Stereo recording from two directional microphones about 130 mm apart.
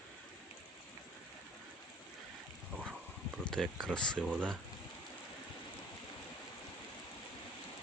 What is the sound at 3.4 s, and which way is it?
Speech, 5° left (ahead or behind).